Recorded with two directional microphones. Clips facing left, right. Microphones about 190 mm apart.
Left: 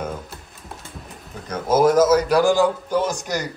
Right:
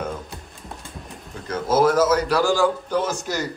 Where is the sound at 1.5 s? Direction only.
10° left (ahead or behind).